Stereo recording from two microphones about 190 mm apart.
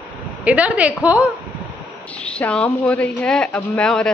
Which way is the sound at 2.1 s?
5° left (ahead or behind).